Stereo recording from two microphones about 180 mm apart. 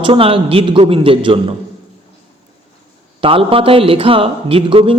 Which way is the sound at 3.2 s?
30° right (ahead or behind).